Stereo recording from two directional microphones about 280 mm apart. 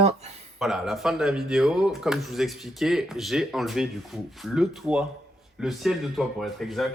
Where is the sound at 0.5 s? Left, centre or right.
Centre.